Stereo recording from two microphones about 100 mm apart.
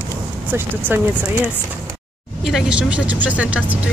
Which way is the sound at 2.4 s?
5° right (ahead or behind).